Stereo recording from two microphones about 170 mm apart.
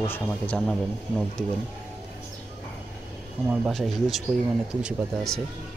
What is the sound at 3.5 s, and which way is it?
Speech, centre (ahead or behind).